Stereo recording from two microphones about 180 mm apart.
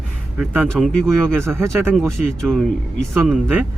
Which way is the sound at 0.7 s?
5° left (ahead or behind).